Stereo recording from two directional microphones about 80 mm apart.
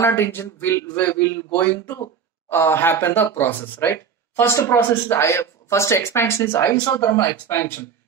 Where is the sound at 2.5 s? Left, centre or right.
Left.